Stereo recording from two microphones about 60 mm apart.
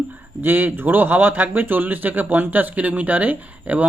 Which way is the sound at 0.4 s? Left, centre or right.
Right.